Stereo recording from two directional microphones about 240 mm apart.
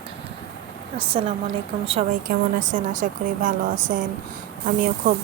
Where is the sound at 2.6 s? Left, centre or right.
Right.